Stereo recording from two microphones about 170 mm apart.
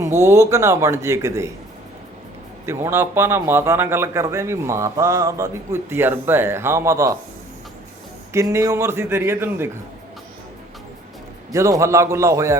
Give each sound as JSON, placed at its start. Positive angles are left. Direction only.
{"t": 0.0, "sound": "a man's voice", "side_deg": -15}
{"t": 2.6, "sound": "a man's voice", "side_deg": -15}
{"t": 8.3, "sound": "a man's voice", "side_deg": -15}
{"t": 11.5, "sound": "a man's voice", "side_deg": -15}